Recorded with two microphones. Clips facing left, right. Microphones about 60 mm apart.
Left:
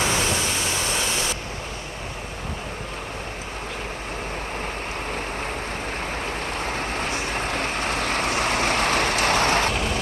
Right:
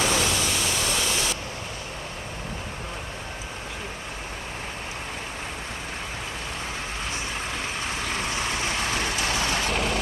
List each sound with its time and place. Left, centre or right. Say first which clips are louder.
0.0 s pink noise: left 1 dB; left
6.7 s vehicle: left 5 dB; left
9.7 s vehicle: even; centre